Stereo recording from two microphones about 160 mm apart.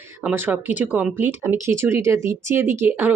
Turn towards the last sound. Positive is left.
turn(degrees=-10)  # may be behind; listen again after turning